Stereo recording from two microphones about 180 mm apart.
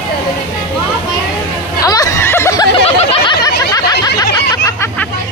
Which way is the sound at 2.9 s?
35° left (ahead or behind).